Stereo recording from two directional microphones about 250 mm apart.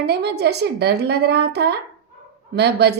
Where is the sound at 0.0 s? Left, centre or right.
Right.